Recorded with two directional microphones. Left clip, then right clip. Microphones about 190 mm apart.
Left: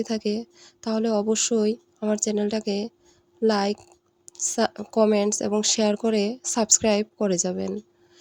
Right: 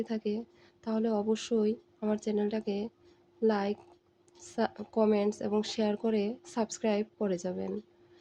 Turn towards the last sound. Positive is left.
turn(degrees=45)  # may be behind; listen again after turning